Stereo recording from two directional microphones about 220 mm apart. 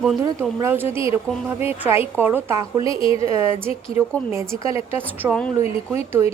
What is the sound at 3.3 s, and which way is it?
Speech, 10° right (ahead or behind).